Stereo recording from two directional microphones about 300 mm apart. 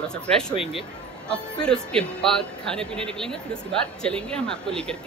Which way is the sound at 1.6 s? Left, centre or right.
Centre.